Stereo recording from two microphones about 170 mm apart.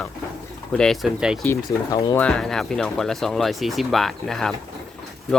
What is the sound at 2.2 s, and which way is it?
Speech, 5° left (ahead or behind).